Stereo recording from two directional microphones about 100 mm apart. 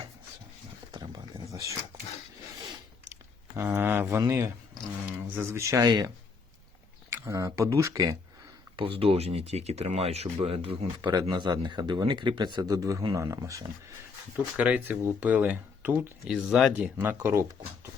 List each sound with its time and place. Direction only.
1.1 s a sound: 35° right (ahead or behind)
3.1 s a sound: 30° right (ahead or behind)
4.2 s speech: 30° right (ahead or behind)
7.1 s speech: 30° right (ahead or behind)
8.7 s speech: 65° right (ahead or behind); by 10.8 s 80° right
10.9 s speech: 45° right (ahead or behind)
14.5 s speech: 15° right (ahead or behind)
16.2 s speech: 5° right (ahead or behind)
16.7 s speech: 15° right (ahead or behind)